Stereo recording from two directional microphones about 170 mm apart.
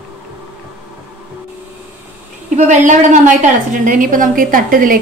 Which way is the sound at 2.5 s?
45° right (ahead or behind).